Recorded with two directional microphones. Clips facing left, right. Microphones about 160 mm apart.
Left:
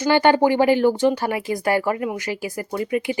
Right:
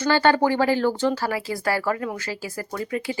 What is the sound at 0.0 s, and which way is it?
Speech, 15° left (ahead or behind).